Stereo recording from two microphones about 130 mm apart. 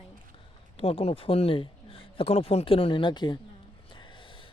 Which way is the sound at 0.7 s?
50° left (ahead or behind).